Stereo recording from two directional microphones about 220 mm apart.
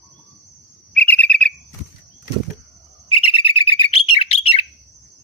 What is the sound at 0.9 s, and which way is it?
Bird, 5° left (ahead or behind).